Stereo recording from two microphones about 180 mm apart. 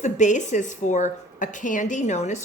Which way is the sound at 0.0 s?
45° left (ahead or behind).